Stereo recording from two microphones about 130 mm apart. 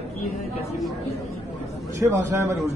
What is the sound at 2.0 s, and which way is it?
Speech, 20° right (ahead or behind).